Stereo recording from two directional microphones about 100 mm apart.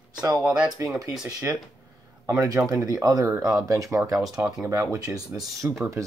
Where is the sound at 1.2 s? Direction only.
35° right (ahead or behind).